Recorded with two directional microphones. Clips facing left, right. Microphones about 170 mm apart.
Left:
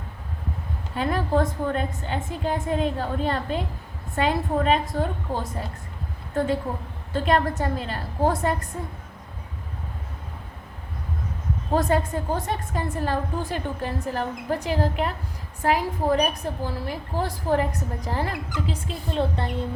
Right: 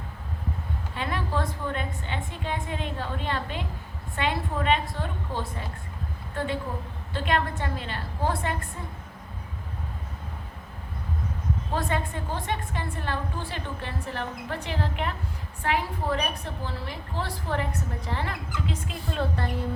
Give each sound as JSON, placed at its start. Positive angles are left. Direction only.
{"t": 0.9, "sound": "a woman's voice", "side_deg": 45}
{"t": 7.1, "sound": "a woman's voice", "side_deg": 40}
{"t": 11.7, "sound": "a woman's voice", "side_deg": 40}